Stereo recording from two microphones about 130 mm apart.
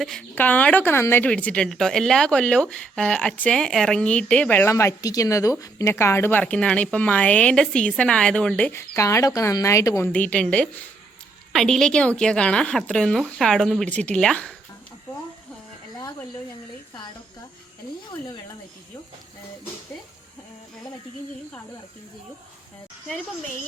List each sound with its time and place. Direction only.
0.0 s a woman's voice: 5° left (ahead or behind)
4.7 s a woman's voice: 25° left (ahead or behind); by 8.7 s 10° left (ahead or behind)
8.7 s speech: 20° left (ahead or behind)
10.1 s a woman's voice: 10° left (ahead or behind)